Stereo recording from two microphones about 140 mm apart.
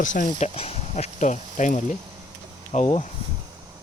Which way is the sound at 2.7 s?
50° left (ahead or behind).